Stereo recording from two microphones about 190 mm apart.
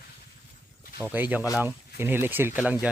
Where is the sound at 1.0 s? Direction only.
10° right (ahead or behind).